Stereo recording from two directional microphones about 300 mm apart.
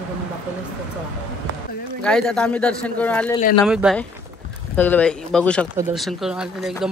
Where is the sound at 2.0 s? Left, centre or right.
Centre.